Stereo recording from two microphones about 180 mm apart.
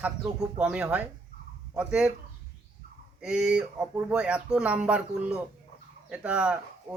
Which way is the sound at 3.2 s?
5° right (ahead or behind).